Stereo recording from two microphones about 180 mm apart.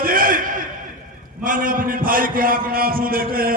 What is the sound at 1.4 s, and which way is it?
A man's voice, 50° right (ahead or behind).